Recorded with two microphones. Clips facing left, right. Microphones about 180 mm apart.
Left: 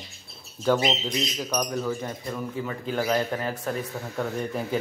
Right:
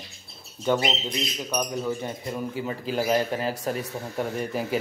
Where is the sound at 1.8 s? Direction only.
20° right (ahead or behind).